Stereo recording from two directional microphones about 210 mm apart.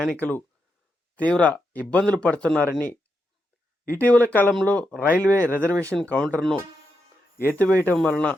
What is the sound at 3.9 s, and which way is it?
Speech, 10° left (ahead or behind).